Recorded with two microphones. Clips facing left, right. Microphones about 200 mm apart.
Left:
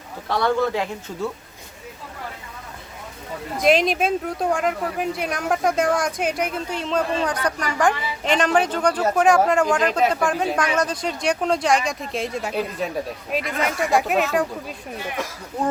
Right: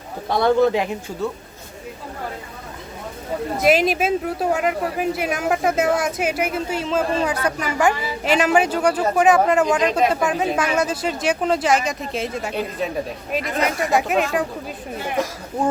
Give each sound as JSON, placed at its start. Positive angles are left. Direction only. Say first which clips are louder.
{"t": 0.3, "sound": "speech", "louder": "right 4 dB", "side_deg": -15}
{"t": 1.2, "sound": "speech", "louder": "right 2 dB", "side_deg": 0}
{"t": 3.6, "sound": "speech", "louder": "even", "side_deg": -5}
{"t": 10.0, "sound": "speech", "louder": "right 1 dB", "side_deg": -5}